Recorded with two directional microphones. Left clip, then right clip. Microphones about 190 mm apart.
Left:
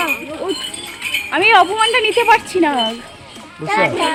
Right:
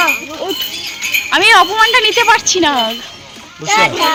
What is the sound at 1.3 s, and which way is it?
Speech, centre (ahead or behind).